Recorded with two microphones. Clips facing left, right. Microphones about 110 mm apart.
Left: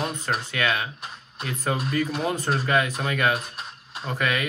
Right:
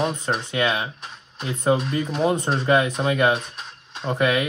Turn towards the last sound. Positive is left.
turn(degrees=-30)  # may be behind; listen again after turning